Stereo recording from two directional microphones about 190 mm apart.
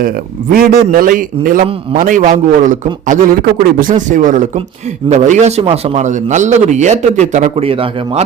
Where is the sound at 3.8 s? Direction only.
40° right (ahead or behind).